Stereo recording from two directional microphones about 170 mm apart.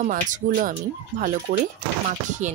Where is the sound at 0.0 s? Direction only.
50° right (ahead or behind).